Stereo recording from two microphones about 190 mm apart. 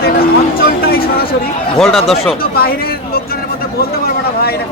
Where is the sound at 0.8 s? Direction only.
50° left (ahead or behind).